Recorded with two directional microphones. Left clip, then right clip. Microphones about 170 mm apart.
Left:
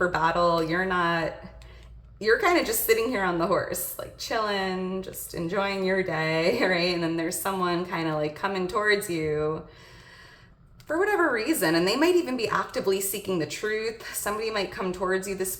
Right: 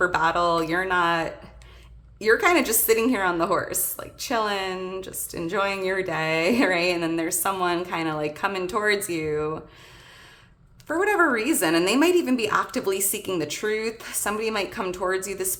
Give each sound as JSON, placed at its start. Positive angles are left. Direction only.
{"t": 0.0, "sound": "a woman's voice", "side_deg": -30}
{"t": 10.8, "sound": "a woman's voice", "side_deg": -35}